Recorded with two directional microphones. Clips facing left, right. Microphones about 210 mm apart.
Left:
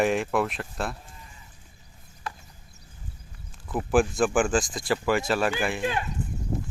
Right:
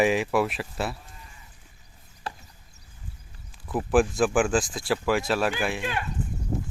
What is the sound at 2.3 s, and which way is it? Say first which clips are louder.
Chop: right 1 dB; 30° right (ahead or behind).